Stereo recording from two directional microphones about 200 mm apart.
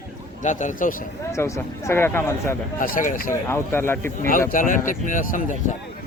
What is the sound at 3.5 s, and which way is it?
Speech, 10° left (ahead or behind).